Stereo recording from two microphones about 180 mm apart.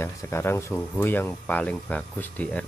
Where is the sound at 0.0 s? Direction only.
15° left (ahead or behind).